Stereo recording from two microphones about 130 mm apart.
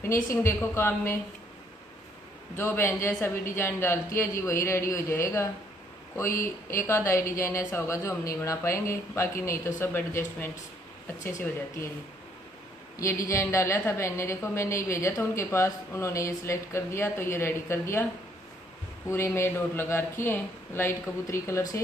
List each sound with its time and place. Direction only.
0.0 s a woman's voice: 20° left (ahead or behind)
2.5 s a woman's voice: 20° left (ahead or behind)
12.9 s a woman's voice: 25° left (ahead or behind)
19.0 s a woman's voice: 20° left (ahead or behind)